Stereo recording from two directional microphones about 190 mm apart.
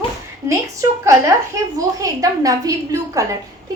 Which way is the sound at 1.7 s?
20° right (ahead or behind).